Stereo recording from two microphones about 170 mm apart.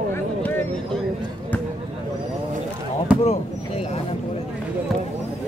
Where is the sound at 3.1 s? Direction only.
10° right (ahead or behind).